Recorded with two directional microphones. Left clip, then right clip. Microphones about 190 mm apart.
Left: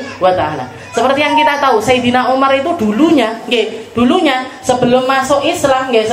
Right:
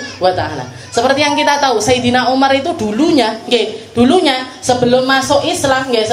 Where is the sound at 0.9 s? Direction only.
45° right (ahead or behind).